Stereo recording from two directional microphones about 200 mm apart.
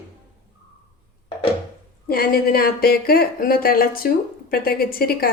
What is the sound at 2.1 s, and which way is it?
Speech, 50° left (ahead or behind).